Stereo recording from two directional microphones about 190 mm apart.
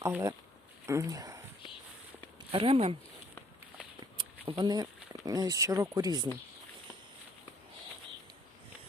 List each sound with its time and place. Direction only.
0.1 s speech: 15° right (ahead or behind)
2.5 s speech: 30° right (ahead or behind)
4.2 s speech: 25° right (ahead or behind)